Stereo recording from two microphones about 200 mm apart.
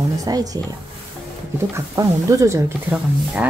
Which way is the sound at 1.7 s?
15° right (ahead or behind).